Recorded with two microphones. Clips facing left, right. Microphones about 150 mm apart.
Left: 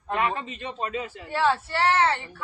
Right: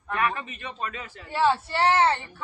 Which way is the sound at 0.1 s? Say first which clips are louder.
Left 1 dB; 25° left (ahead or behind).